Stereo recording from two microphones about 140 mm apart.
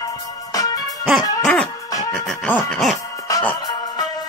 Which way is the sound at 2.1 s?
5° left (ahead or behind).